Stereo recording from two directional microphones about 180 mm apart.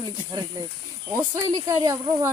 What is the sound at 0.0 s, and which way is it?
Speech, 25° right (ahead or behind).